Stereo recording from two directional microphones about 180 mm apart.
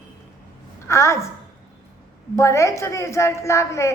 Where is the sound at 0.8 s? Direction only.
15° left (ahead or behind).